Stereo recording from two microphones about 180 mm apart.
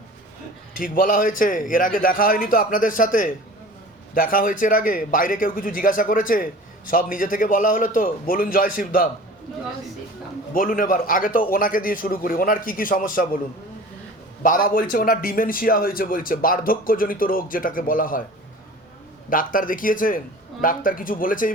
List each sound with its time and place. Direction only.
0.8 s a man's voice: 50° left (ahead or behind)
10.5 s a man's voice: 50° left (ahead or behind)
14.4 s a man's voice: 50° left (ahead or behind)
19.3 s a man's voice: 50° left (ahead or behind)